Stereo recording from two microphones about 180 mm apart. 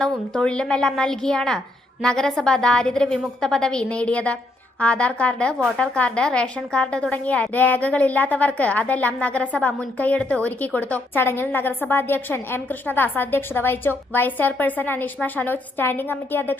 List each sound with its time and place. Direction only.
0.3 s a woman's voice: 5° left (ahead or behind)